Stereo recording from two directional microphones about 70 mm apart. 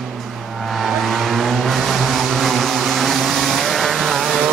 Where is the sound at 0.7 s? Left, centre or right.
Centre.